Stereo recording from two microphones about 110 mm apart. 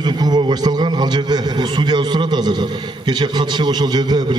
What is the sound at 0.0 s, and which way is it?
A man's voice, 40° right (ahead or behind).